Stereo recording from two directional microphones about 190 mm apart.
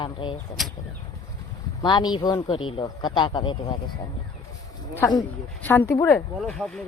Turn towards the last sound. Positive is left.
turn(degrees=5)  # may be behind; listen again after turning